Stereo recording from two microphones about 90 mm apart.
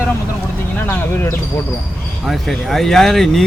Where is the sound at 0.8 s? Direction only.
30° left (ahead or behind).